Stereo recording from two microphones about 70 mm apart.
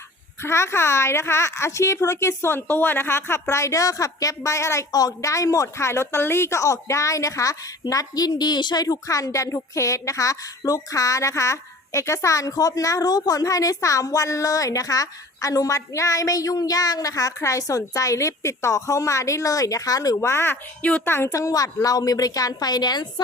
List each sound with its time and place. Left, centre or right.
0.4 s a woman's voice: left
4.9 s a woman's voice: left
9.0 s a woman's voice: left
20.3 s a woman's voice: left
21.2 s a woman's voice: left